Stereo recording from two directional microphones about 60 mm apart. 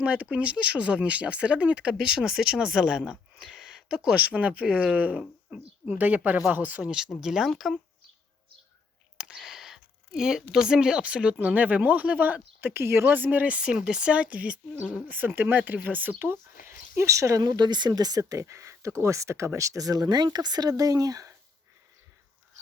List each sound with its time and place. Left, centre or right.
0.0 s speech: centre
3.4 s a sound: centre
4.2 s speech: right
5.9 s speech: right
6.8 s speech: centre
7.5 s speech: centre
9.1 s a sound: centre
11.3 s speech: right
13.1 s speech: right
16.2 s speech: right
17.9 s speech: right
19.5 s speech: right